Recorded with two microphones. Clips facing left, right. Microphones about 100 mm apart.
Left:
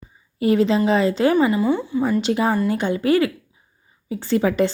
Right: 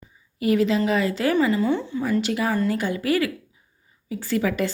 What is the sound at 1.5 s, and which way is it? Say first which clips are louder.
Speech: left 3 dB; 10° left (ahead or behind).